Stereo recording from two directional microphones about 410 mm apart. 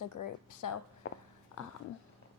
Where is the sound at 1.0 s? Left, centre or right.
Left.